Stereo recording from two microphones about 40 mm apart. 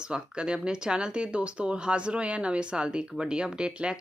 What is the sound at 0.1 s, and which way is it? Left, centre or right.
Speech, right.